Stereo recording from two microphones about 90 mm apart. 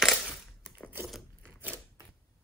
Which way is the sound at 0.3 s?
15° right (ahead or behind).